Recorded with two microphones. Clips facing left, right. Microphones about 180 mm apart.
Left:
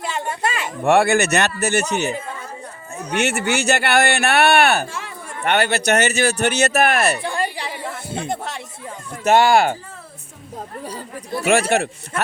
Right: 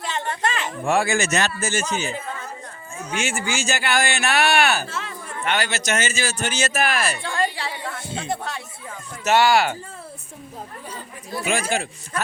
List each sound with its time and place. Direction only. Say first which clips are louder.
0.0 s a sound: left 2 dB; 10° left (ahead or behind)
0.9 s speech: left 6 dB; 65° left (ahead or behind)
4.9 s speech: even; 15° left (ahead or behind)
5.4 s speech: left 6 dB; 60° left (ahead or behind)
7.2 s chatter: left 1 dB; 15° left (ahead or behind)
8.3 s speech: right 2 dB; 25° left (ahead or behind)
9.2 s speech: left 3 dB; 50° left (ahead or behind)
11.7 s speech: left 6 dB; 65° left (ahead or behind)